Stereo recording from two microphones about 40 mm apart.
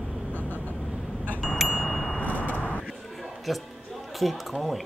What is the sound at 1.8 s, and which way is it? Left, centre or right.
Wind chime, centre.